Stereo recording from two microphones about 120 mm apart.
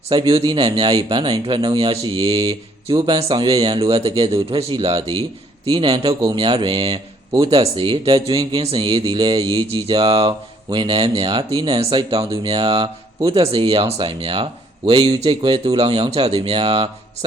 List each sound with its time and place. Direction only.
0.1 s speech: 40° right (ahead or behind)